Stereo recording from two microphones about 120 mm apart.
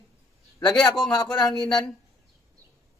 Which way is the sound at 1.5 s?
5° left (ahead or behind).